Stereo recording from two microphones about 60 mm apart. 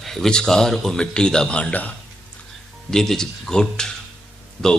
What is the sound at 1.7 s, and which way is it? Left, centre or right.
Speech, left.